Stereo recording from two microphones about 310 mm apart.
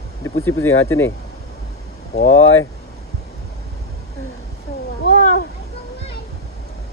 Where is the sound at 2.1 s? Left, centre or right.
Left.